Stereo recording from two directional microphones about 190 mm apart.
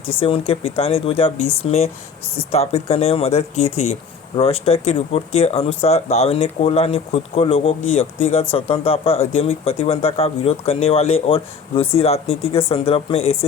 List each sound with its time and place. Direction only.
0.1 s speech: 30° left (ahead or behind)